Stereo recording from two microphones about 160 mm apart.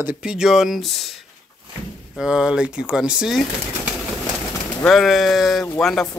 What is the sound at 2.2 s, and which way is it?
Speech, 5° right (ahead or behind).